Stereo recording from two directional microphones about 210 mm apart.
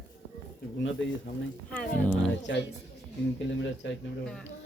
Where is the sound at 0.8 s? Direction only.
60° left (ahead or behind).